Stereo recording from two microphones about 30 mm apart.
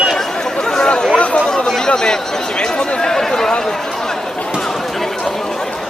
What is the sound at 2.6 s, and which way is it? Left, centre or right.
Chatter, left.